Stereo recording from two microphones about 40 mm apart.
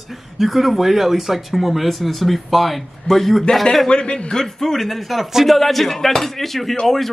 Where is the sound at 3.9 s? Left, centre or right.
Left.